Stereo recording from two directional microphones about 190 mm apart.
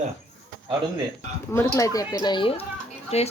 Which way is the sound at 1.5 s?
15° left (ahead or behind).